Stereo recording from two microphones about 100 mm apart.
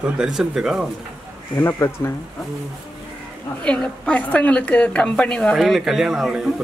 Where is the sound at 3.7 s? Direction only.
10° left (ahead or behind).